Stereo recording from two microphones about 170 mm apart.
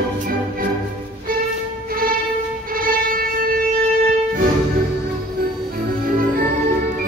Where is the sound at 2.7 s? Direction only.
60° right (ahead or behind).